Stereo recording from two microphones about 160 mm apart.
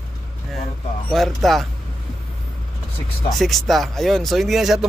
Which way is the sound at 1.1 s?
Centre (ahead or behind).